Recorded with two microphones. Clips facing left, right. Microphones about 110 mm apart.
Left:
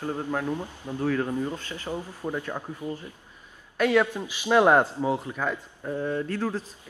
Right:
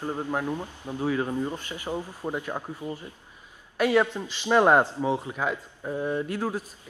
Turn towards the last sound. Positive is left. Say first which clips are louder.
# even
turn(degrees=-15)  # may be behind; listen again after turning